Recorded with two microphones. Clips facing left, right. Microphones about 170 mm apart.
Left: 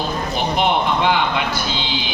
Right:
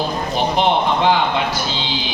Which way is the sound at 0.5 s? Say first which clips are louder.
Right 1 dB; 35° right (ahead or behind).